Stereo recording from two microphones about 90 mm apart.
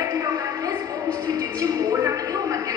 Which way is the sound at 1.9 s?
30° right (ahead or behind).